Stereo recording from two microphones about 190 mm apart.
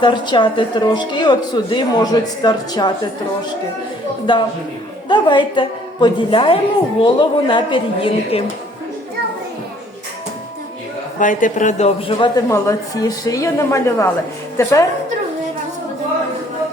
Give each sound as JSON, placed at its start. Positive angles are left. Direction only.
{"t": 0.0, "sound": "a woman's voice", "side_deg": 25}
{"t": 5.0, "sound": "a woman's voice", "side_deg": 25}
{"t": 11.2, "sound": "a man's voice", "side_deg": 45}
{"t": 12.5, "sound": "a woman's voice", "side_deg": 15}